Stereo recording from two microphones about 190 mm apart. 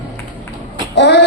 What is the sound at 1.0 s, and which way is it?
Music, 65° left (ahead or behind).